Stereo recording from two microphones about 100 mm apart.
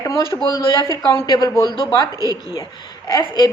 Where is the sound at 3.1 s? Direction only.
40° left (ahead or behind).